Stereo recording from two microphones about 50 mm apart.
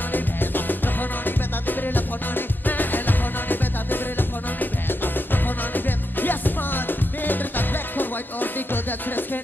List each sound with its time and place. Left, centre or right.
0.1 s music: left